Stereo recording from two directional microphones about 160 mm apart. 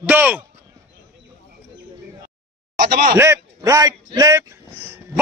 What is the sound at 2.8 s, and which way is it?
Speech, 75° right (ahead or behind).